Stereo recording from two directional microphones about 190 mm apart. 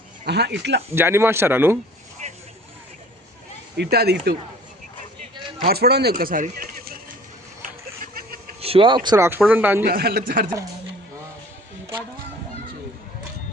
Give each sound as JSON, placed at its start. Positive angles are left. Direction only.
{"t": 0.3, "sound": "speech", "side_deg": -60}
{"t": 0.9, "sound": "speech", "side_deg": -10}
{"t": 2.2, "sound": "vehicle", "side_deg": -35}
{"t": 3.8, "sound": "speech", "side_deg": -55}
{"t": 5.6, "sound": "speech", "side_deg": -55}
{"t": 7.6, "sound": "a sound", "side_deg": -45}
{"t": 8.6, "sound": "speech", "side_deg": -30}
{"t": 9.0, "sound": "speech", "side_deg": -15}
{"t": 9.8, "sound": "speech", "side_deg": -55}